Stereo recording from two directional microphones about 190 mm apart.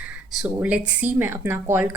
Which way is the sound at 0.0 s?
5° right (ahead or behind).